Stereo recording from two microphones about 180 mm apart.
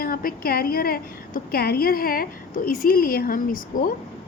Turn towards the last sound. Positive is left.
turn(degrees=50)  # may be behind; listen again after turning